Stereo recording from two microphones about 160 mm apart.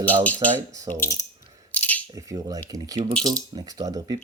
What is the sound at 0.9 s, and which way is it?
Speech, 15° left (ahead or behind).